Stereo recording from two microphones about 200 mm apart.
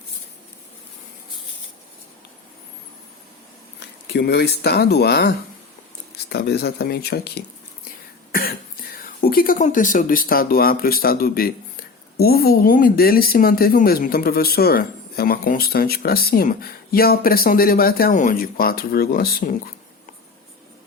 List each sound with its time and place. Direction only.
3.8 s speech: 55° left (ahead or behind)